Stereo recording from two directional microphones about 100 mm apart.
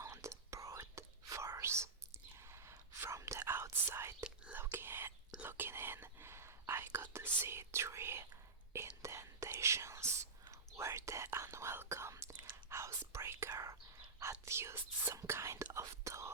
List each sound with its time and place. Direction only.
0.0 s whispering: 30° right (ahead or behind)